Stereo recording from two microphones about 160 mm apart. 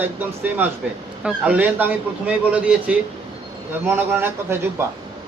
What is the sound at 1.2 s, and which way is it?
A woman's voice, 10° right (ahead or behind).